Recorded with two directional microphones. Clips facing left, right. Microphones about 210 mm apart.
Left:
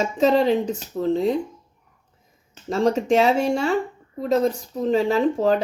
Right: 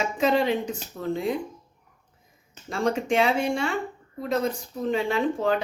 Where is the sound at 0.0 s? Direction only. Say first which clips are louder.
Left 5 dB; 40° left (ahead or behind).